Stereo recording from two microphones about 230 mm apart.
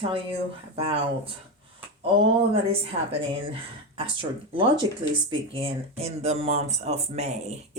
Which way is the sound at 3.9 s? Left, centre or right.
Right.